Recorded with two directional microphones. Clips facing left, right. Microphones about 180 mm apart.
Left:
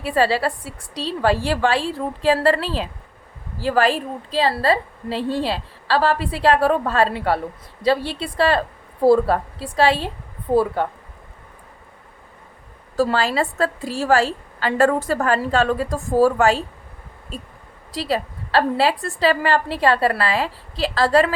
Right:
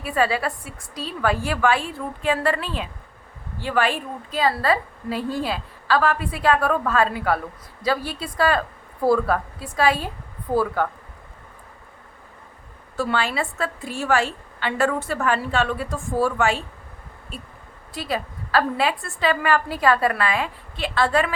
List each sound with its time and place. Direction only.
0.0 s a woman's voice: 30° left (ahead or behind)
13.0 s a woman's voice: 35° left (ahead or behind)
18.1 s a woman's voice: 30° left (ahead or behind)